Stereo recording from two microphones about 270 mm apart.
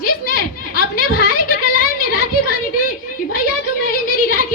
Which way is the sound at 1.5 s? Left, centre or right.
Left.